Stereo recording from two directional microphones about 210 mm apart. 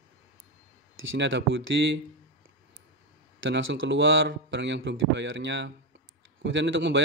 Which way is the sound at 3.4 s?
60° right (ahead or behind).